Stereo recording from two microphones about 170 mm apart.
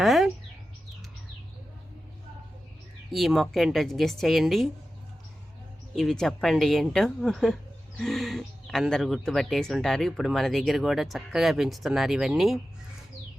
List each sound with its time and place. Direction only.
0.0 s bird: centre (ahead or behind)
3.1 s speech: centre (ahead or behind)
6.0 s speech: centre (ahead or behind)